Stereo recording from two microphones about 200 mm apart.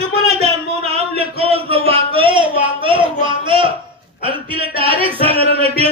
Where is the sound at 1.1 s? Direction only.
30° right (ahead or behind).